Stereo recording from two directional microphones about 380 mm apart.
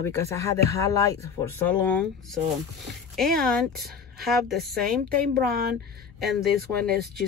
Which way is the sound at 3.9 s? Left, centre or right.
Right.